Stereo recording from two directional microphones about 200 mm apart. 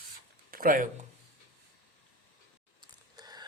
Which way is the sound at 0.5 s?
45° right (ahead or behind).